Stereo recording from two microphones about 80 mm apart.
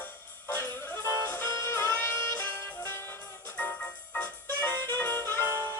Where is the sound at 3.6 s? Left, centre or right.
Centre.